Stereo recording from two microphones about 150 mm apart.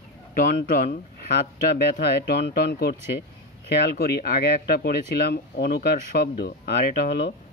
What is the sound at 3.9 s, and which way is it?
Speech, 90° left.